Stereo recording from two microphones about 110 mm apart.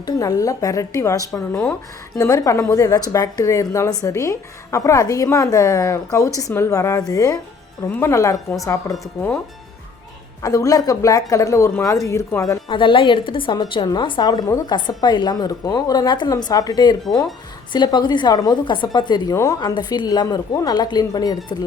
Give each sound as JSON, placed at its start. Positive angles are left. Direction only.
{"t": 0.0, "sound": "a woman's voice", "side_deg": 30}
{"t": 7.9, "sound": "a woman's voice", "side_deg": 20}
{"t": 10.4, "sound": "a woman's voice", "side_deg": 30}
{"t": 12.6, "sound": "a woman's voice", "side_deg": 50}